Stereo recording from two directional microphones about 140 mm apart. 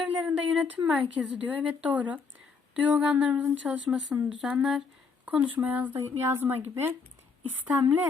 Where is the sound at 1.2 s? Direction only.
5° right (ahead or behind).